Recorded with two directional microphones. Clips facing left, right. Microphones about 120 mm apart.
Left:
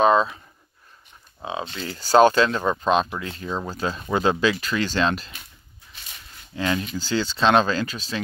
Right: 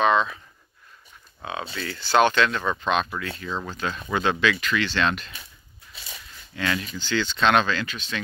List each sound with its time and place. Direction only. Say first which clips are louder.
0.0 s speech: left 3 dB; 35° left (ahead or behind)
1.4 s speech: left 2 dB; 25° left (ahead or behind)
2.0 s speech: left 4 dB; 40° left (ahead or behind)
6.5 s speech: left 3 dB; 30° left (ahead or behind)